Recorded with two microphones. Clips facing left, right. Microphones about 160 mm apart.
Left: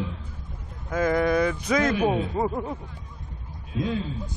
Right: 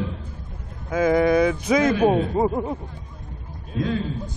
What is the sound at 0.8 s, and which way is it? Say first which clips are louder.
Speech: right 4 dB; 10° right (ahead or behind).